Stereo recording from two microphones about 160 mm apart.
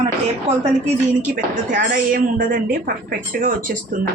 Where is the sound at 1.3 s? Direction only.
60° right (ahead or behind).